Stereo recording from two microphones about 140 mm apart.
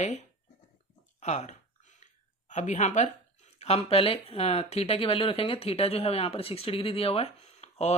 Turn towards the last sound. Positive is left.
turn(degrees=50)  # may be behind; listen again after turning